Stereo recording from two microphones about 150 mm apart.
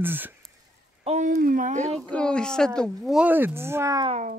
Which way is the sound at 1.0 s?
55° right (ahead or behind).